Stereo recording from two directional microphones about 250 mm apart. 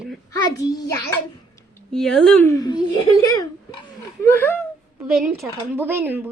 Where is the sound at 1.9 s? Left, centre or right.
Centre.